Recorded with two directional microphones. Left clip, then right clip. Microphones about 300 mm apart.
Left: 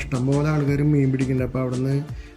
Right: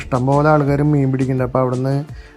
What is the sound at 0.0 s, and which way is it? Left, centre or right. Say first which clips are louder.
Speech: right 9 dB; centre.